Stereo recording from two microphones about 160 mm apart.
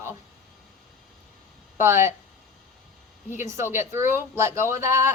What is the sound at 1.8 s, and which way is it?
Speech, 15° right (ahead or behind).